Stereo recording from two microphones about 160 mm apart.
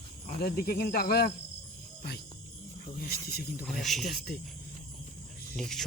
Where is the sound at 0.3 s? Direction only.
70° left (ahead or behind).